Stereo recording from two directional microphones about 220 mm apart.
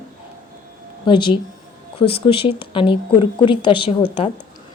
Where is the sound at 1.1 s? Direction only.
20° left (ahead or behind).